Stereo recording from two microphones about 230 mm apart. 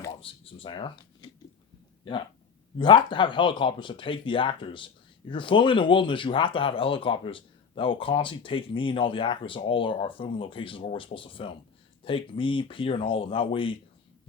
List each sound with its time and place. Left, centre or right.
0.2 s speech: left
2.7 s speech: centre